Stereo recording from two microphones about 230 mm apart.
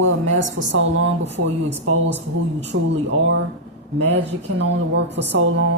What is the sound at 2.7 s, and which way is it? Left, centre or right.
Speech, right.